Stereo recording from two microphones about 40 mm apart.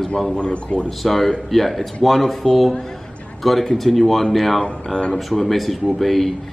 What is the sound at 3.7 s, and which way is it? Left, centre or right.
Speech, centre.